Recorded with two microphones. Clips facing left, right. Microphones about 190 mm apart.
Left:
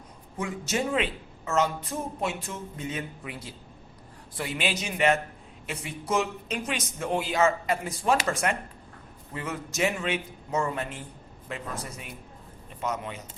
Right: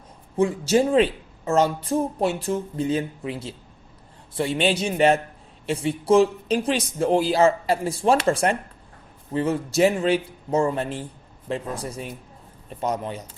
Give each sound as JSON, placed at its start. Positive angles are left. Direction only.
{"t": 0.3, "sound": "speech", "side_deg": -30}